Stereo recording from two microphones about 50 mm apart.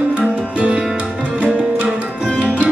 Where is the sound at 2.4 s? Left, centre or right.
Right.